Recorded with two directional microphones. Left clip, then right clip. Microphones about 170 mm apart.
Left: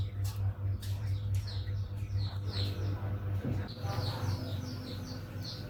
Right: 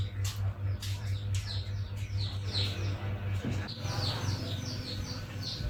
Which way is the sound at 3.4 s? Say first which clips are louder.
Right 1 dB; 30° right (ahead or behind).